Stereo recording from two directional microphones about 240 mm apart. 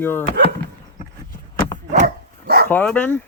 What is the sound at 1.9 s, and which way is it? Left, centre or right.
Dog, right.